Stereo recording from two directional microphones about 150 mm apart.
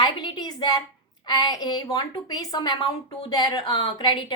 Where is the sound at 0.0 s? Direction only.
30° left (ahead or behind).